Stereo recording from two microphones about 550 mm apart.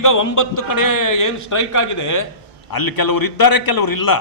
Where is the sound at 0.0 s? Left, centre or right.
Left.